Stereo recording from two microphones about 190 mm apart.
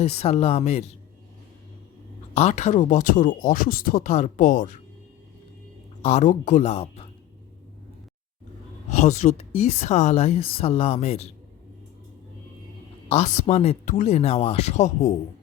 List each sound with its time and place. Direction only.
0.0 s speech: 30° left (ahead or behind)
2.3 s speech: 35° left (ahead or behind)
6.0 s speech: 35° left (ahead or behind)
8.9 s speech: 40° left (ahead or behind)
13.1 s speech: 35° left (ahead or behind)